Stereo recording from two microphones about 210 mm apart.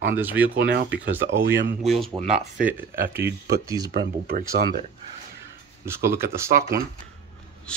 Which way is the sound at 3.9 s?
45° right (ahead or behind).